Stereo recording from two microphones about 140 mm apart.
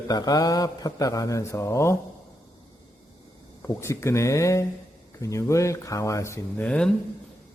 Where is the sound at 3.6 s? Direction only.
20° left (ahead or behind).